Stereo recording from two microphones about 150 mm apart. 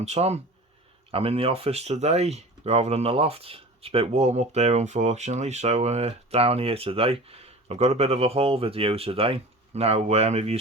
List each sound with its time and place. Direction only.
0.0 s speech: 45° right (ahead or behind)